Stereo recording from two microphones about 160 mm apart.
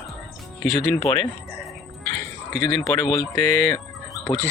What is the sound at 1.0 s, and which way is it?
Speech, 20° left (ahead or behind).